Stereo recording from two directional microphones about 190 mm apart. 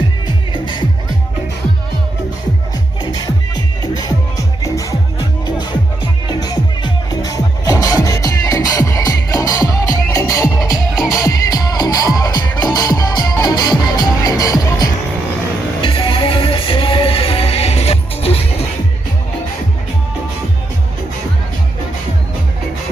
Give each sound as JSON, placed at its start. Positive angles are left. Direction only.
{"t": 0.5, "sound": "music", "side_deg": 25}
{"t": 3.0, "sound": "music", "side_deg": 20}
{"t": 6.2, "sound": "music", "side_deg": 20}